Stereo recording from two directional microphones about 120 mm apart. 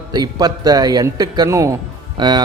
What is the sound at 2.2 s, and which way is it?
Speech, 40° right (ahead or behind).